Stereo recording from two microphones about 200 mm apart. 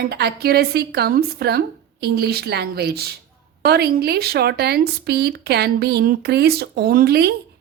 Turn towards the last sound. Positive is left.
turn(degrees=-55)  # may be behind; listen again after turning